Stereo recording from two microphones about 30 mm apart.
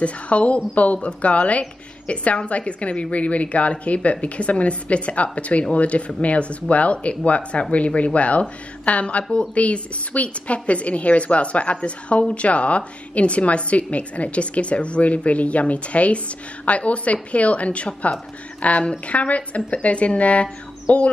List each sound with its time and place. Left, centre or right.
0.0 s a woman's voice: left
1.6 s a woman's voice: left